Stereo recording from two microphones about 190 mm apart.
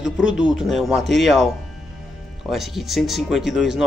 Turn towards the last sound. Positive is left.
turn(degrees=0)  # may be behind; listen again after turning